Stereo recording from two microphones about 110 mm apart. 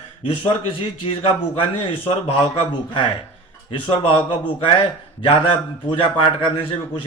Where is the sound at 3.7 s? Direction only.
50° left (ahead or behind).